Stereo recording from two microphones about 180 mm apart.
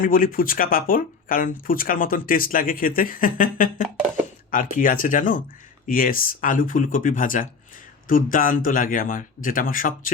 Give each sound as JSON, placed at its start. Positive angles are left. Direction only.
{"t": 0.0, "sound": "speech", "side_deg": 50}